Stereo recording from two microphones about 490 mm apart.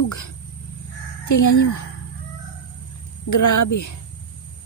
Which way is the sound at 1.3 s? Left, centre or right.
Left.